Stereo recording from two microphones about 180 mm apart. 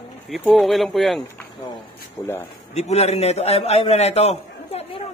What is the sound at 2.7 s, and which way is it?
A man's voice, 35° left (ahead or behind).